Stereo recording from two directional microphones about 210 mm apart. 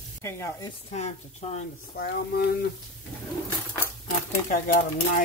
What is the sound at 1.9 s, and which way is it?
Speech, 50° left (ahead or behind).